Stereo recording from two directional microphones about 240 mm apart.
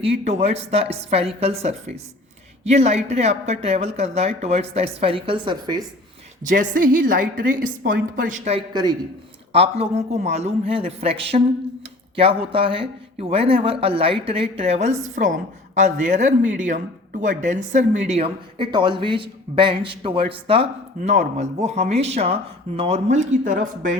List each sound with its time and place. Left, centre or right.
0.0 s speech: right
6.5 s a woman's voice: right